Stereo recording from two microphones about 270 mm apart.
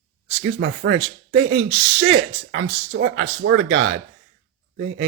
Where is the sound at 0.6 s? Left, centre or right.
Right.